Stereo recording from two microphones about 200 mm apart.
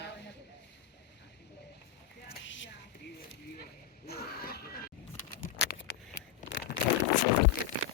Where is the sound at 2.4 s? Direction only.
70° left (ahead or behind).